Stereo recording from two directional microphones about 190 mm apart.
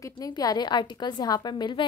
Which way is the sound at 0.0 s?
20° left (ahead or behind).